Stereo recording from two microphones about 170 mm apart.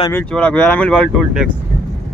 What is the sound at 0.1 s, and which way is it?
Speech, 5° left (ahead or behind).